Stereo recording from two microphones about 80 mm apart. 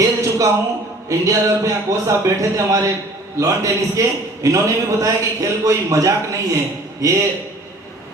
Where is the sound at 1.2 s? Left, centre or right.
Right.